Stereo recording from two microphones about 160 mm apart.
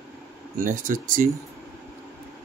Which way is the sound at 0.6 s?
55° right (ahead or behind).